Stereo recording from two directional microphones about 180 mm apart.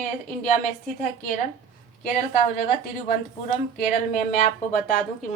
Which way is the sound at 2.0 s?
50° left (ahead or behind).